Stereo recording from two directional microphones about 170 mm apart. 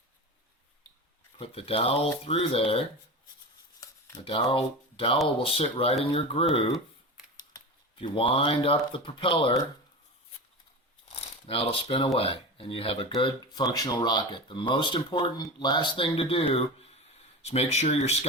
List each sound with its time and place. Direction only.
1.4 s speech: 35° left (ahead or behind)
4.3 s speech: 30° left (ahead or behind)
7.9 s speech: 30° left (ahead or behind)
11.1 s speech: 35° left (ahead or behind)